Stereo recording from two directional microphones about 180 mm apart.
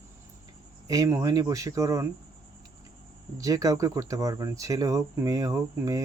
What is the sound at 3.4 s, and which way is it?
Speech, 20° right (ahead or behind).